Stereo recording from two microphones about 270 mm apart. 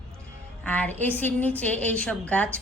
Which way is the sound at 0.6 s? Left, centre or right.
Centre.